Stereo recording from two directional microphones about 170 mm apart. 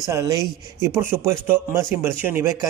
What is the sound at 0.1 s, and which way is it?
A man's voice, 20° right (ahead or behind).